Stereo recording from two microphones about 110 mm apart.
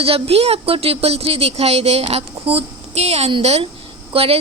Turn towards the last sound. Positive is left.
turn(degrees=-60)  # may be behind; listen again after turning